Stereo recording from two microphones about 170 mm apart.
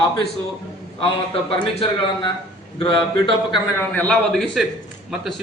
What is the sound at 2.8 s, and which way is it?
Speech, 30° left (ahead or behind).